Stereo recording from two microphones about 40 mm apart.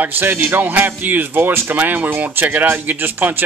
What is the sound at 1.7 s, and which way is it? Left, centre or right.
Speech, right.